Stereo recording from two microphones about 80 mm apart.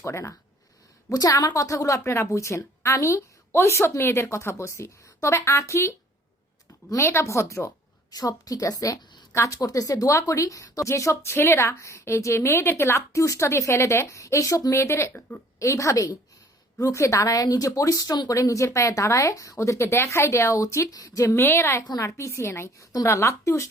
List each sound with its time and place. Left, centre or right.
0.0 s a woman's voice: left
1.1 s a woman's voice: left
6.9 s a woman's voice: left
8.1 s a woman's voice: left
21.3 s a woman's voice: left